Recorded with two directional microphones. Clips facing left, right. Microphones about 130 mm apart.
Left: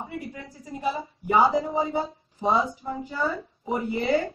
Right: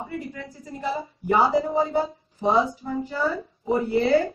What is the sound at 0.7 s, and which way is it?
Speech, 15° left (ahead or behind).